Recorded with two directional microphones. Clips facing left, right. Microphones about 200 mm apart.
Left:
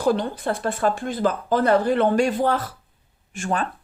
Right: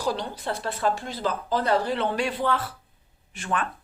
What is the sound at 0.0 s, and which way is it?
Speech, 50° left (ahead or behind).